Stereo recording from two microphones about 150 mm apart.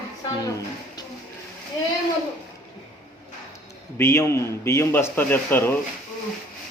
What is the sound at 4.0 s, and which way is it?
A man's voice, 15° left (ahead or behind).